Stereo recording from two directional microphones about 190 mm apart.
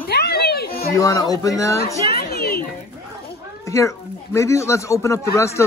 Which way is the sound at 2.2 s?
55° left (ahead or behind).